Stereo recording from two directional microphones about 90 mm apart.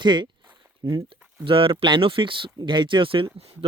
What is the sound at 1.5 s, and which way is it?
Speech, 80° right.